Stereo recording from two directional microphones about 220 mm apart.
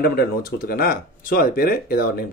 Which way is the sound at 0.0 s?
45° left (ahead or behind).